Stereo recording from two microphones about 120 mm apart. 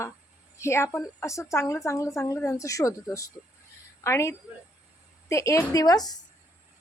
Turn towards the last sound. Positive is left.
turn(degrees=35)  # may be behind; listen again after turning